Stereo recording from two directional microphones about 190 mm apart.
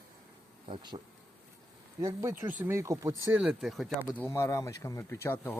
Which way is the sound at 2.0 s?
20° right (ahead or behind).